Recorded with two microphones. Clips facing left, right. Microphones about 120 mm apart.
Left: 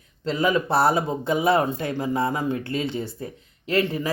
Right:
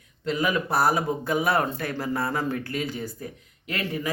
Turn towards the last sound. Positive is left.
turn(degrees=30)  # may be behind; listen again after turning